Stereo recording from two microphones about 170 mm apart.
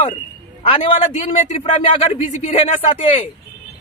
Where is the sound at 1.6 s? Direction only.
30° left (ahead or behind).